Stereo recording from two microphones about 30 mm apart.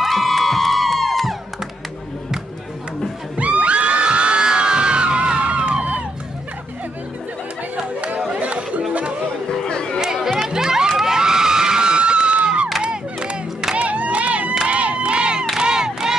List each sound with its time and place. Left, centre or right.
0.0 s music: centre
3.3 s music: right
4.5 s crowd: right
8.4 s chatter: right
9.5 s chatter: left
9.9 s chatter: centre
10.5 s music: right
11.1 s screaming: right
12.8 s crowd: right
13.7 s crowd: right
15.5 s crowd: right